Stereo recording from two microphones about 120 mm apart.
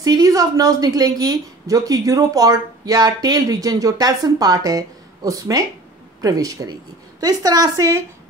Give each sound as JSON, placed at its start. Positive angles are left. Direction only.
{"t": 0.0, "sound": "a woman's voice", "side_deg": -30}